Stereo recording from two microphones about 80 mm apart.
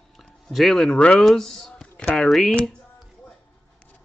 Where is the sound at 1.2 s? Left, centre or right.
Centre.